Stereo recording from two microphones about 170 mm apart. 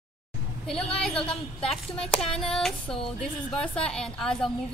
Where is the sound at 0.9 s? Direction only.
5° left (ahead or behind).